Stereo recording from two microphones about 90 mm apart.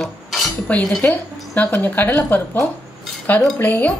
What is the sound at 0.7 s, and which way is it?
A woman's voice, 15° left (ahead or behind).